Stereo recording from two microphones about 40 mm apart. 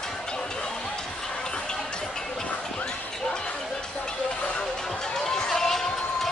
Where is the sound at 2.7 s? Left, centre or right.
Centre.